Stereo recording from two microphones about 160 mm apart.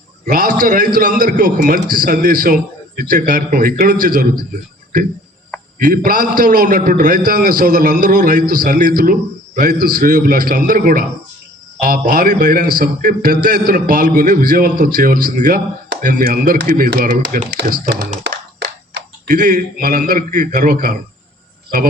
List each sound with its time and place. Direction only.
0.3 s a man's voice: 60° right (ahead or behind)
5.8 s a man's voice: 60° right (ahead or behind)
18.9 s a man's voice: 60° right (ahead or behind)